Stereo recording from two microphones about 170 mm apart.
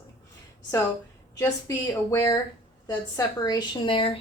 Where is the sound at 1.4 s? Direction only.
20° left (ahead or behind).